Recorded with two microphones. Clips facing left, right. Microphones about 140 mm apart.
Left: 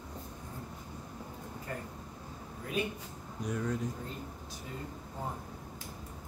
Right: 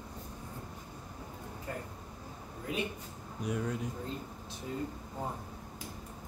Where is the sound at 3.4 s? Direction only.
10° right (ahead or behind).